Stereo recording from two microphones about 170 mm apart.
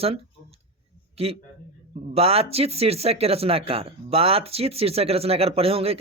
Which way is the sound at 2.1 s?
35° right (ahead or behind).